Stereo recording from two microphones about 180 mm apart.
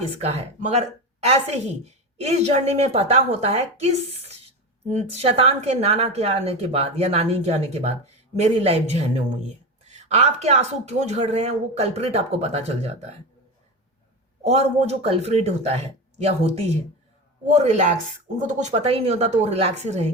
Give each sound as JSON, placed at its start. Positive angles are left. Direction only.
{"t": 0.2, "sound": "speech", "side_deg": -35}
{"t": 14.4, "sound": "speech", "side_deg": -35}